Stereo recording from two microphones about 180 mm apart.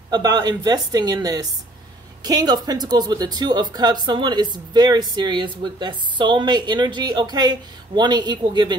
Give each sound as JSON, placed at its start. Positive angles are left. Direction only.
{"t": 0.1, "sound": "speech", "side_deg": -25}